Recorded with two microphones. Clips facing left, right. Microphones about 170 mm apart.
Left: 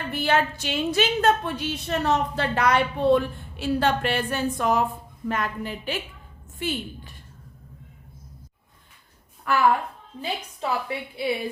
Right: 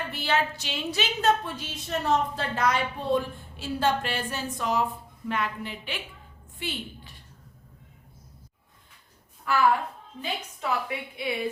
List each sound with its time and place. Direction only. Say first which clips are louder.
0.1 s a woman's voice: left 6 dB; 50° left (ahead or behind)
5.3 s a woman's voice: left 2 dB; 45° left (ahead or behind)
9.5 s a woman's voice: left 2 dB; 60° left (ahead or behind)
10.2 s a woman's voice: left 3 dB; 30° left (ahead or behind)